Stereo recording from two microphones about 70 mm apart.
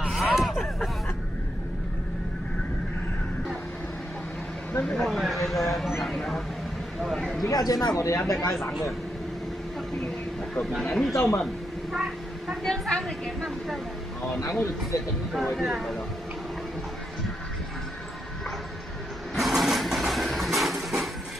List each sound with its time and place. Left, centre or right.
0.1 s a sound: centre
4.8 s a woman's voice: centre
7.5 s speech: left
10.8 s speech: centre
11.4 s a sound: centre
12.6 s a woman's voice: centre
14.4 s speech: left
15.5 s speech: centre
19.3 s engine: centre